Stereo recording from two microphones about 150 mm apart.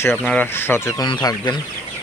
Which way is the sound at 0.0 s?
10° left (ahead or behind).